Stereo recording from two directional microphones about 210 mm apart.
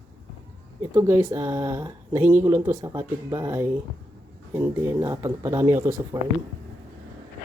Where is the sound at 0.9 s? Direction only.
10° right (ahead or behind).